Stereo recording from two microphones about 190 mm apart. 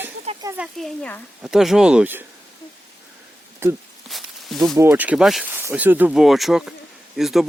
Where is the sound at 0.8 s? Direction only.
5° left (ahead or behind).